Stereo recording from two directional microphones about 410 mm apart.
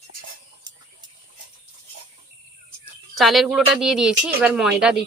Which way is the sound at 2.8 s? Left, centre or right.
Centre.